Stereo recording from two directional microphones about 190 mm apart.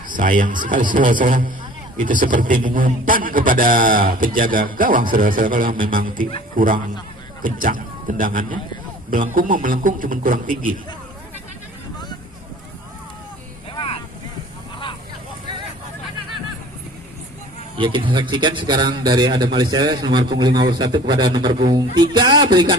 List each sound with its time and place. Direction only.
0.1 s a man's voice: 45° right (ahead or behind)
13.7 s vehicle: 25° left (ahead or behind)
17.7 s a man's voice: 25° right (ahead or behind)